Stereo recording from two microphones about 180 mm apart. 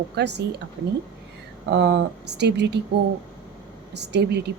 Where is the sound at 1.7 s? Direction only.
75° right (ahead or behind).